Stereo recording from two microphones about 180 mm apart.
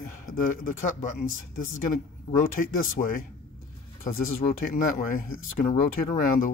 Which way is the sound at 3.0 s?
55° left (ahead or behind).